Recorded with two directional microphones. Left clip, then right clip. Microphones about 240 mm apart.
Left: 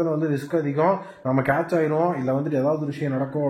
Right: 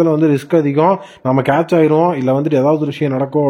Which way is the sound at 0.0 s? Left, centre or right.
Right.